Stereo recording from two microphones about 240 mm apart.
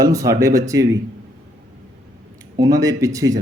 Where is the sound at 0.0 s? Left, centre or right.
Centre.